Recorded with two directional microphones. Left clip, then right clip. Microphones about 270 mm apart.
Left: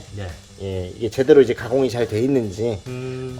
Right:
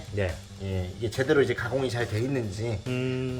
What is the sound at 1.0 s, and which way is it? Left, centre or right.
Speech, left.